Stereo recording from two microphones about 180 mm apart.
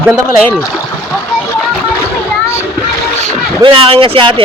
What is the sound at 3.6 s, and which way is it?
Speech, 30° right (ahead or behind).